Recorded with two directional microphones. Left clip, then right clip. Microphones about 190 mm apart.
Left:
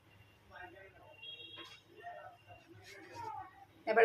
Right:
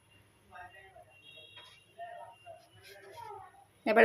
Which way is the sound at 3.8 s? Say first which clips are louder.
Right 4 dB; 50° right (ahead or behind).